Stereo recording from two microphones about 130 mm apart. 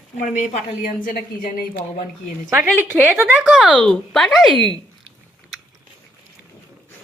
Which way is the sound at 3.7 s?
10° left (ahead or behind).